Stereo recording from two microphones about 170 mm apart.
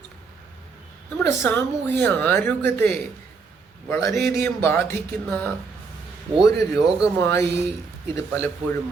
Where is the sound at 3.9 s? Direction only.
15° left (ahead or behind).